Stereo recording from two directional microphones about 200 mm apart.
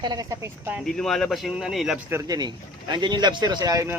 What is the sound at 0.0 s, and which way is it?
Speech, 20° right (ahead or behind).